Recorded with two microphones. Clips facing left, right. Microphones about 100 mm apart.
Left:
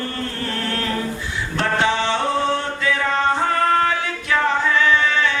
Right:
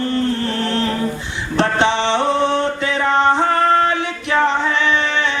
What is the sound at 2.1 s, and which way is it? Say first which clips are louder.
Music: right 4 dB; 20° right (ahead or behind).